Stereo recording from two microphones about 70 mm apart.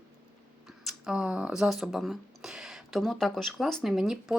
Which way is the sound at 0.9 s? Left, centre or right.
Centre.